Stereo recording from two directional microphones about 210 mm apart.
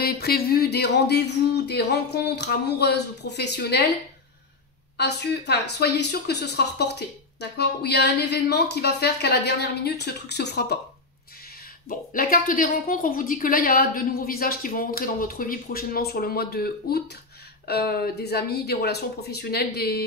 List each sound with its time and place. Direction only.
0.0 s speech: 45° left (ahead or behind)
4.9 s speech: 55° left (ahead or behind)
12.1 s speech: 40° left (ahead or behind)